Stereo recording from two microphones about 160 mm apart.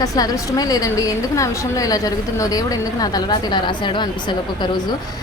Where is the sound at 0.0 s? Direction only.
20° left (ahead or behind).